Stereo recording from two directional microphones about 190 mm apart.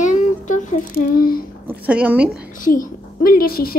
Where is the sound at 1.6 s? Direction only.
5° right (ahead or behind).